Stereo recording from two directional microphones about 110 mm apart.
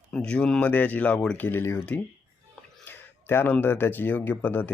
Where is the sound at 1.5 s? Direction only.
20° left (ahead or behind).